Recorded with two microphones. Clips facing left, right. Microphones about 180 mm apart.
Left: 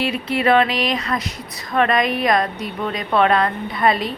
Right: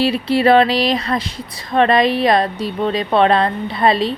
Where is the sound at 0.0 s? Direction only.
35° right (ahead or behind).